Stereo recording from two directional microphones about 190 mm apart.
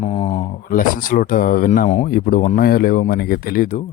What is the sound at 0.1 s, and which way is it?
Speech, 30° left (ahead or behind).